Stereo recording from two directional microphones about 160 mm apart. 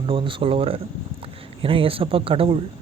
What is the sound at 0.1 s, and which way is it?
Speech, 35° right (ahead or behind).